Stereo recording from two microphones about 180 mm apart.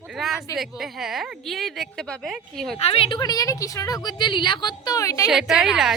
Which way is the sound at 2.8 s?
30° left (ahead or behind).